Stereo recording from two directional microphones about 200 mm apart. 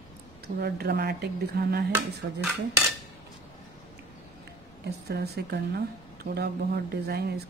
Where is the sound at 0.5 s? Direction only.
50° right (ahead or behind).